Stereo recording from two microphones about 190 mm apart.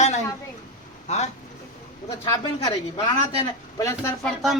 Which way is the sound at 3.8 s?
15° left (ahead or behind).